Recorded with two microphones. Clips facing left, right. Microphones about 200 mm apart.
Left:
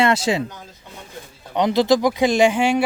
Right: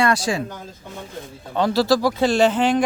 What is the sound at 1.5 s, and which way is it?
Speech, 20° left (ahead or behind).